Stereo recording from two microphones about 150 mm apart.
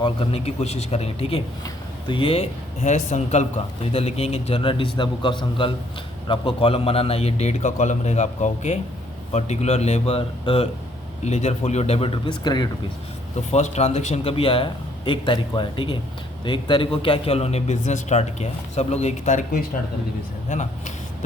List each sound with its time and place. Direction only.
0.0 s a man's voice: 40° left (ahead or behind)
11.2 s speech: 50° left (ahead or behind); by 12.6 s 30° left (ahead or behind)
13.5 s a man's voice: 45° left (ahead or behind)